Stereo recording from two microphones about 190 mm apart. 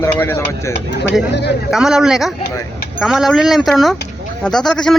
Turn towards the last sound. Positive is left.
turn(degrees=0)  # may be behind; listen again after turning